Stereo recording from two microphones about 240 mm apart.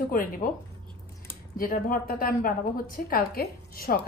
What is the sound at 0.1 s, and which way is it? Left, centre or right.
Speech, left.